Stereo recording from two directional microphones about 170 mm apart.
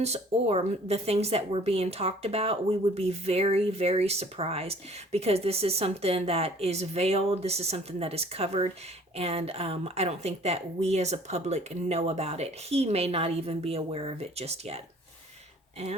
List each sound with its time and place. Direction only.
0.0 s speech: 40° right (ahead or behind)